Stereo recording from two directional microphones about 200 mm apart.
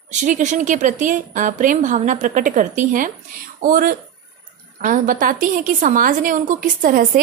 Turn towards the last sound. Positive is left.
turn(degrees=-40)  # may be behind; listen again after turning